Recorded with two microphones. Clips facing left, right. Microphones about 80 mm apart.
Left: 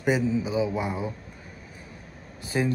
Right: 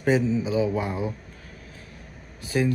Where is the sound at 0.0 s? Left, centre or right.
Centre.